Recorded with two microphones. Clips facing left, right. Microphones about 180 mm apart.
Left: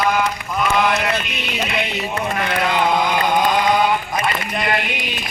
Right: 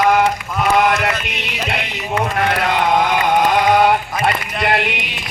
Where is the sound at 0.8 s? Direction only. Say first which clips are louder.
Right 3 dB; 65° right (ahead or behind).